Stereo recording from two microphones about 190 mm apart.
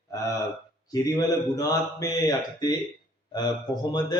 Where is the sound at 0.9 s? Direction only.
20° left (ahead or behind).